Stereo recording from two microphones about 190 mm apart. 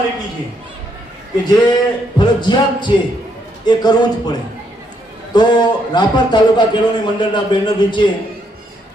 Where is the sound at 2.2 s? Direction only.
25° left (ahead or behind).